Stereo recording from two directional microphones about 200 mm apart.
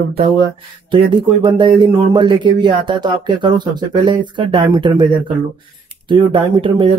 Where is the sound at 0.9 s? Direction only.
25° right (ahead or behind).